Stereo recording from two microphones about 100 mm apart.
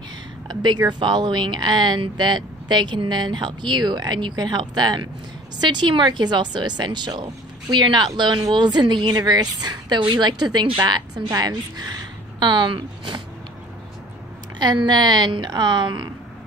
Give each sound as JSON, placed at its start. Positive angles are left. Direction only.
{"t": 0.5, "sound": "speech", "side_deg": -45}
{"t": 14.6, "sound": "speech", "side_deg": -45}